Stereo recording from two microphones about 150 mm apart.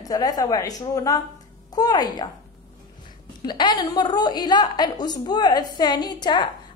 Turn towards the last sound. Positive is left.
turn(degrees=30)  # may be behind; listen again after turning